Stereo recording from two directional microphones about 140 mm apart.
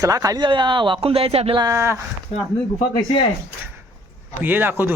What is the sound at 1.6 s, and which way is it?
Speech, 20° right (ahead or behind).